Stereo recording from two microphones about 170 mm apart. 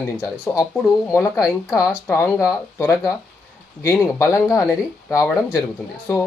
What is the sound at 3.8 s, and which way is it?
Speech, 15° left (ahead or behind).